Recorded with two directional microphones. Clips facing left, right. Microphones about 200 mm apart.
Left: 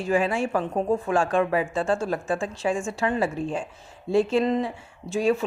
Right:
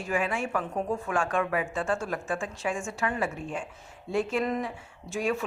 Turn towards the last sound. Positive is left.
turn(degrees=30)  # may be behind; listen again after turning